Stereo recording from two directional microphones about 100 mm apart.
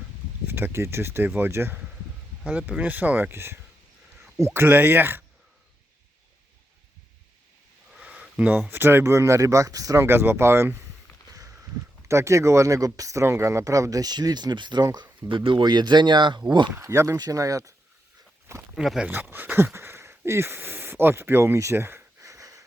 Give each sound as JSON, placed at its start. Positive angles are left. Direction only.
{"t": 0.4, "sound": "speech", "side_deg": -20}
{"t": 2.4, "sound": "speech", "side_deg": -10}
{"t": 7.9, "sound": "a sound", "side_deg": -10}
{"t": 8.7, "sound": "speech", "side_deg": -20}
{"t": 10.1, "sound": "speech", "side_deg": -25}
{"t": 11.3, "sound": "a sound", "side_deg": -35}
{"t": 12.0, "sound": "speech", "side_deg": -30}
{"t": 16.7, "sound": "speech", "side_deg": -30}
{"t": 18.7, "sound": "speech", "side_deg": -5}
{"t": 19.0, "sound": "speech", "side_deg": -20}